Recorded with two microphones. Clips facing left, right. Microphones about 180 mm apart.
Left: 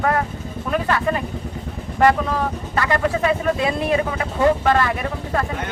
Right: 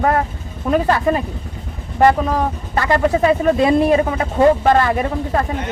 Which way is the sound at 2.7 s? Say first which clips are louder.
Right 5 dB; 30° right (ahead or behind).